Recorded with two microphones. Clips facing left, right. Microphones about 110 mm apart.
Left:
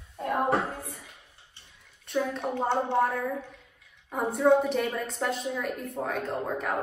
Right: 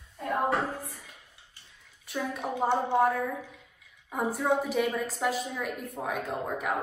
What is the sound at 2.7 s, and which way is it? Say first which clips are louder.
Speech: right 1 dB; 15° right (ahead or behind).